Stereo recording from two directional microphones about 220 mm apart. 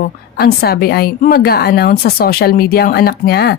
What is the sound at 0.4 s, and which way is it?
A woman's voice, 45° left (ahead or behind).